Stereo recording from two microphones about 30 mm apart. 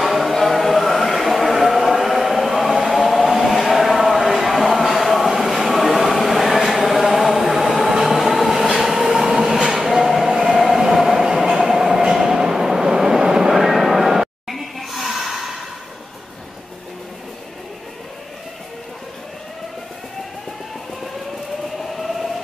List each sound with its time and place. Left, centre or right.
0.0 s chant: centre
7.5 s a sound: centre
8.0 s train: centre
13.5 s a sound: centre
14.5 s snort: centre
21.9 s train: centre